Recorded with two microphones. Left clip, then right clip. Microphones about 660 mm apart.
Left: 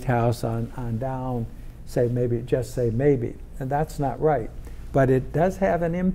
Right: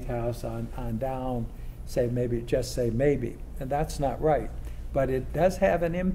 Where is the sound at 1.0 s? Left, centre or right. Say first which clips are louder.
Left 1 dB; left.